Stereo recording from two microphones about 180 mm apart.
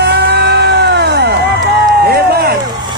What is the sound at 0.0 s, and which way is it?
Music, 70° right (ahead or behind).